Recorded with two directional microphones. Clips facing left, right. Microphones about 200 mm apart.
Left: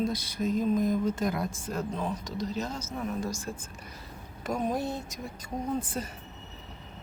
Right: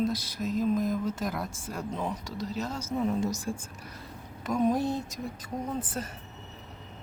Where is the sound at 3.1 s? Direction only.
20° right (ahead or behind).